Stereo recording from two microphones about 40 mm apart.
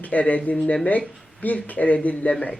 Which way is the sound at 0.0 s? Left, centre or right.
Left.